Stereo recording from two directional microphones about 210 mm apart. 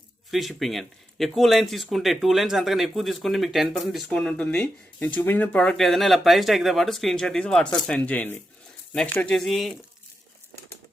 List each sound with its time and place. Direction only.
0.3 s speech: centre (ahead or behind)